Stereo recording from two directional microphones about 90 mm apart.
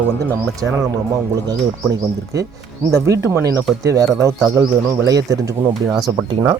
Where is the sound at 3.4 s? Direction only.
40° right (ahead or behind).